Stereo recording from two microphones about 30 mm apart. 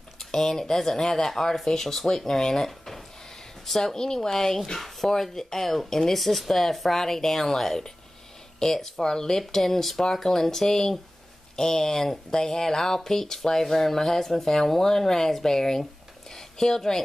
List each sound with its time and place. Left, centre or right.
0.2 s speech: centre
4.0 s speech: left
6.1 s speech: centre; by 9.4 s left
9.5 s speech: centre